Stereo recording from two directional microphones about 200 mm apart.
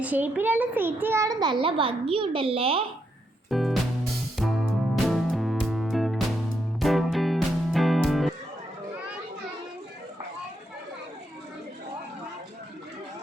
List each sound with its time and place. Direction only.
0.0 s a child's voice: 10° right (ahead or behind); by 2.8 s 30° right (ahead or behind)
3.5 s music: centre (ahead or behind)
5.0 s music: centre (ahead or behind)